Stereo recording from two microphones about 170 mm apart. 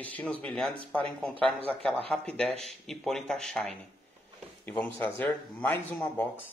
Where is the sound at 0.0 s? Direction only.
10° left (ahead or behind).